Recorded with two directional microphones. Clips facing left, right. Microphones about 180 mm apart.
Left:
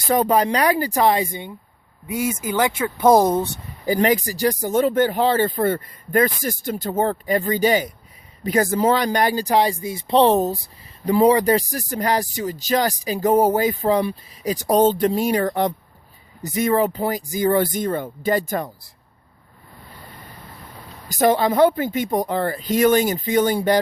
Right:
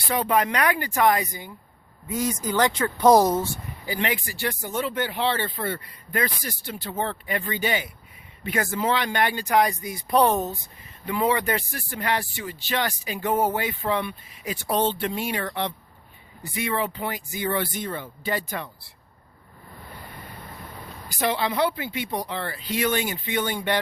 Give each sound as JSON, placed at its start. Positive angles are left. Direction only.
{"t": 0.0, "sound": "speech", "side_deg": 45}
{"t": 2.0, "sound": "speech", "side_deg": 10}
{"t": 3.8, "sound": "speech", "side_deg": 40}
{"t": 21.1, "sound": "speech", "side_deg": 45}